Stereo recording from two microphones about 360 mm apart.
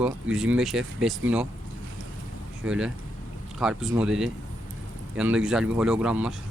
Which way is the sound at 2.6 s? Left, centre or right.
Centre.